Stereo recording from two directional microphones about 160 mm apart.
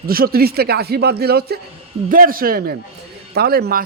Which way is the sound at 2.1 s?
65° right (ahead or behind).